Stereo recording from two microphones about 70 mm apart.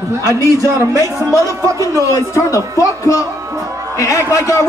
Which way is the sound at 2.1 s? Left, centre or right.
Left.